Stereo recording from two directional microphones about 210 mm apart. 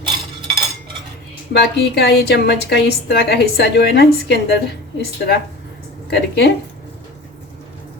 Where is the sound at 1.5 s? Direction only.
50° left (ahead or behind).